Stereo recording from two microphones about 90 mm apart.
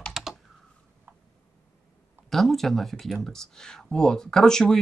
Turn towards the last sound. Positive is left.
turn(degrees=5)  # may be behind; listen again after turning